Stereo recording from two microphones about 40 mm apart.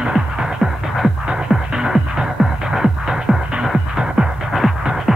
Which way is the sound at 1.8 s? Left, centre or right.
Centre.